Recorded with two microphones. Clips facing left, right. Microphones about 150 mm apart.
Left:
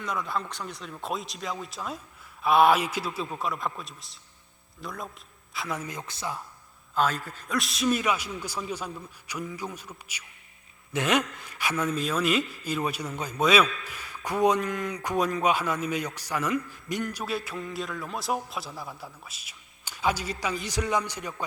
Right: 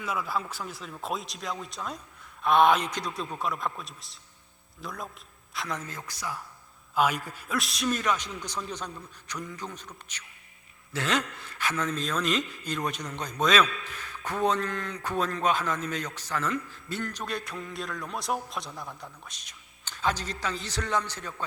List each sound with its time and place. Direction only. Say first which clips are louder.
0.0 s a man's voice: even; 5° right (ahead or behind); by 6.4 s 25° left (ahead or behind)
6.9 s a man's voice: even; 10° right (ahead or behind); by 21.4 s 15° left (ahead or behind)